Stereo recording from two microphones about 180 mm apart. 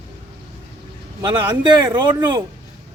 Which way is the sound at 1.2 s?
25° right (ahead or behind).